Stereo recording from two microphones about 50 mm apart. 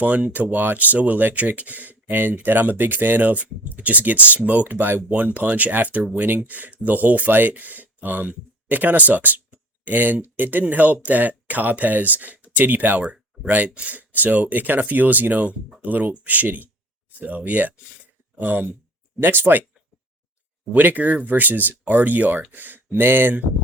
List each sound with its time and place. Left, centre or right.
0.0 s speech: right
20.7 s speech: right